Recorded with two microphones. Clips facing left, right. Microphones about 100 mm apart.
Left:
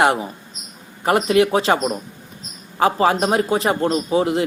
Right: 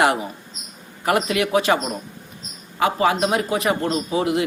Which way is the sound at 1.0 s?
30° left (ahead or behind).